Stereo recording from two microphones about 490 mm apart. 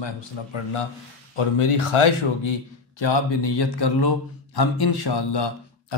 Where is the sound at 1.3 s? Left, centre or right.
Left.